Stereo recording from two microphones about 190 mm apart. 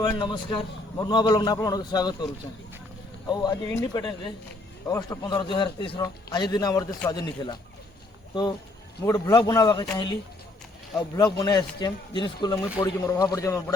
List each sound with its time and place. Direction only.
0.0 s a man's voice: 25° left (ahead or behind)
9.0 s a man's voice: 20° left (ahead or behind)
10.9 s a man's voice: 20° left (ahead or behind)